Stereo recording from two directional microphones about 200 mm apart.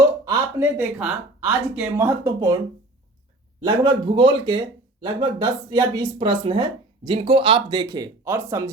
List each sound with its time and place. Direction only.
0.0 s a sound: 15° right (ahead or behind)
0.8 s speech: 5° right (ahead or behind)
3.6 s speech: 20° right (ahead or behind)